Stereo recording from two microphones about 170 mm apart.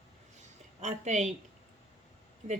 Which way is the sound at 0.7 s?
40° right (ahead or behind).